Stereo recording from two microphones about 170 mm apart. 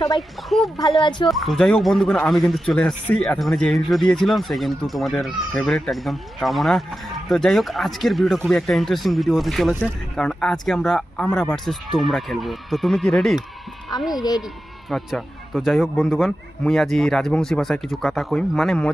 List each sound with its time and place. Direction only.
0.5 s speech: centre (ahead or behind)
1.0 s speech: 30° left (ahead or behind)
1.3 s speech: centre (ahead or behind)
14.9 s speech: centre (ahead or behind)